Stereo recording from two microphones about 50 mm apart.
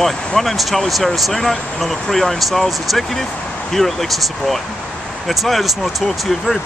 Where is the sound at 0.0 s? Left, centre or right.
Centre.